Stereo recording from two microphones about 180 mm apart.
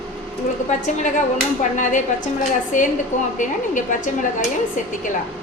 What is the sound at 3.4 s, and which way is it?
Speech, 45° left (ahead or behind).